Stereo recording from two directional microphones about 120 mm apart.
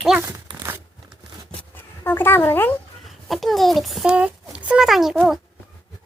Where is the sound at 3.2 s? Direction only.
Centre (ahead or behind).